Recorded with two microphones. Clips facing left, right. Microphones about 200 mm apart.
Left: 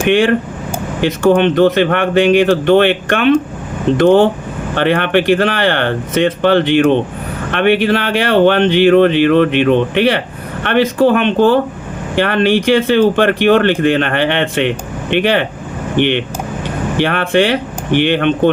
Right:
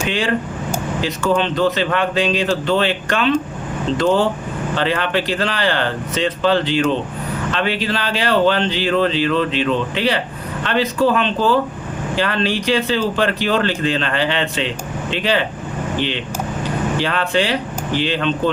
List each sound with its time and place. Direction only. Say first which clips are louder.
0.0 s speech: left 8 dB; 65° left (ahead or behind)